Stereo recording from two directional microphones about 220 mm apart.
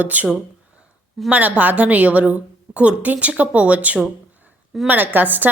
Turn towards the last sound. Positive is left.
turn(degrees=-10)  # may be behind; listen again after turning